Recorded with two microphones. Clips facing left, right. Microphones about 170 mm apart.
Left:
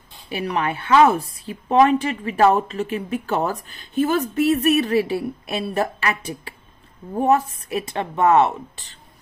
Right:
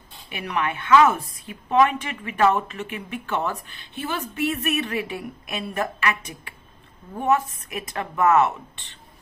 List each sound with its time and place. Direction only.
0.3 s a woman's voice: 35° left (ahead or behind)